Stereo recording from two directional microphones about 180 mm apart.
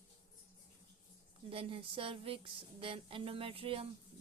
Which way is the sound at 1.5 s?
30° right (ahead or behind).